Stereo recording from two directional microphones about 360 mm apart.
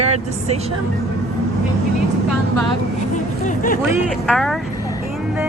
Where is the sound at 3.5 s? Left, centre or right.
Left.